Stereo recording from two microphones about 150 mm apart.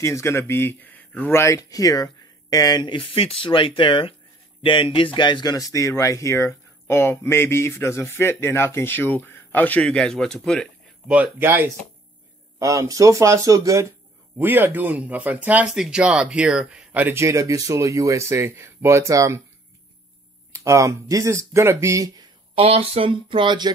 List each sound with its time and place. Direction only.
0.0 s speech: 20° left (ahead or behind); by 10.7 s 5° left (ahead or behind)
11.1 s speech: 10° right (ahead or behind)
20.5 s speech: 20° right (ahead or behind)
22.6 s speech: 40° right (ahead or behind)